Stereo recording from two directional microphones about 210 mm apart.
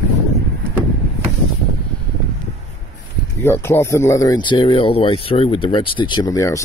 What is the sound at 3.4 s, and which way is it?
Speech, 10° left (ahead or behind).